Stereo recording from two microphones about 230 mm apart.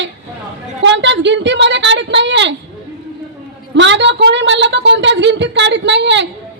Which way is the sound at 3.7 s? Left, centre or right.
Right.